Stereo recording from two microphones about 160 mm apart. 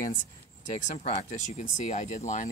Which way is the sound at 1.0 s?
50° left (ahead or behind).